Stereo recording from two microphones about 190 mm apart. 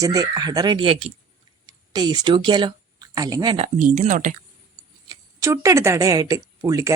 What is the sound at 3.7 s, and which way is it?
Speech, 40° right (ahead or behind).